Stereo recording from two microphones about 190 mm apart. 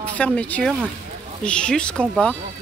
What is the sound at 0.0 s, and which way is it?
Speech, 5° left (ahead or behind).